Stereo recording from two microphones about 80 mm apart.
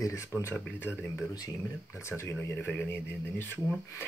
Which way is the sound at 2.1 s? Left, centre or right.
Left.